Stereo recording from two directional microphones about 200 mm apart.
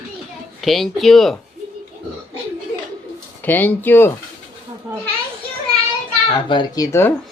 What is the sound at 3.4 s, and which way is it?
Speech, 10° left (ahead or behind).